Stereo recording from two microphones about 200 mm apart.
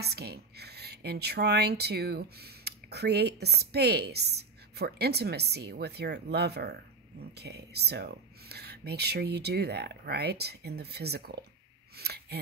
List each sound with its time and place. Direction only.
0.0 s a woman's voice: 55° right (ahead or behind)